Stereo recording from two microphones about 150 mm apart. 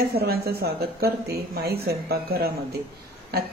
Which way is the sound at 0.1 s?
90° right.